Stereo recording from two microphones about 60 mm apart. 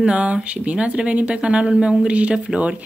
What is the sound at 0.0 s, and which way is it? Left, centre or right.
Speech, right.